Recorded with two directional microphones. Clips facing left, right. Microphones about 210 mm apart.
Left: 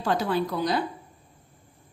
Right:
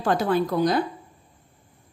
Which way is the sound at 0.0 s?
50° right (ahead or behind).